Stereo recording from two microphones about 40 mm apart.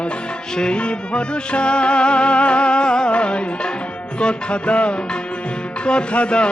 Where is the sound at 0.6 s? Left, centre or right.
Left.